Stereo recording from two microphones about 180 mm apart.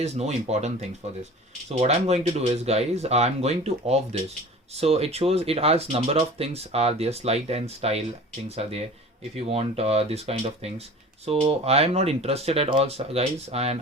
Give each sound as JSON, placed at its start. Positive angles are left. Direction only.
{"t": 0.0, "sound": "speech", "side_deg": -35}